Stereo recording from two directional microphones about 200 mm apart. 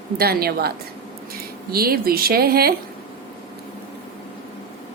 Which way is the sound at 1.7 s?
50° right (ahead or behind).